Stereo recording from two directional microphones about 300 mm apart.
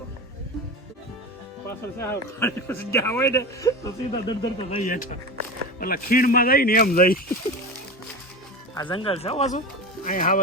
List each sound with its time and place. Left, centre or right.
1.6 s speech: centre; by 7.2 s left
8.7 s speech: centre